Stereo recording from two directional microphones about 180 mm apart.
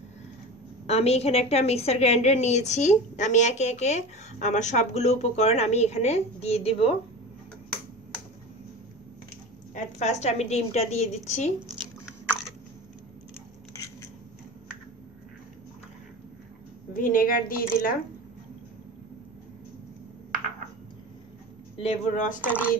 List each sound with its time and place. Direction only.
0.8 s a woman's voice: 35° left (ahead or behind)
9.8 s a woman's voice: 40° left (ahead or behind)
16.9 s a woman's voice: 50° left (ahead or behind)
21.7 s a woman's voice: 40° left (ahead or behind)
22.4 s speech: 10° right (ahead or behind)